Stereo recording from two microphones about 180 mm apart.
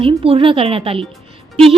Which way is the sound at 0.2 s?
30° right (ahead or behind).